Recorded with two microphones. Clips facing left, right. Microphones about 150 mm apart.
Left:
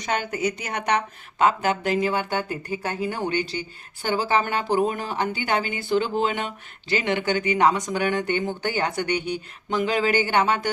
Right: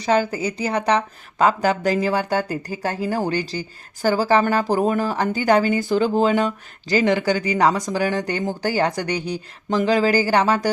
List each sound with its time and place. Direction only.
0.0 s a woman's voice: 30° right (ahead or behind)